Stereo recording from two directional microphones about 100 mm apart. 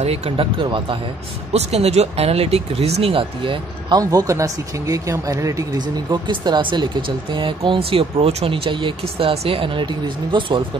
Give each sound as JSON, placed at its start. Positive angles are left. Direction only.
{"t": 0.0, "sound": "speech", "side_deg": -90}
{"t": 1.5, "sound": "speech", "side_deg": -90}
{"t": 4.0, "sound": "speech", "side_deg": -35}
{"t": 6.1, "sound": "speech", "side_deg": -45}
{"t": 9.3, "sound": "speech", "side_deg": -80}